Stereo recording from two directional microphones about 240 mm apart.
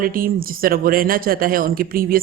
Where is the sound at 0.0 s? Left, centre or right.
Right.